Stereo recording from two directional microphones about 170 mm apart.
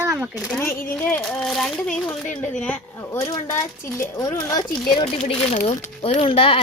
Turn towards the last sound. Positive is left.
turn(degrees=30)  # may be behind; listen again after turning